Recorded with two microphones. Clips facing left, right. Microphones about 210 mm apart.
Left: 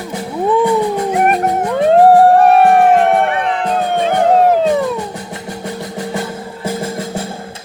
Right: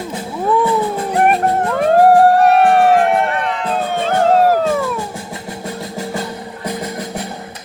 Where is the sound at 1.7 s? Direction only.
20° left (ahead or behind).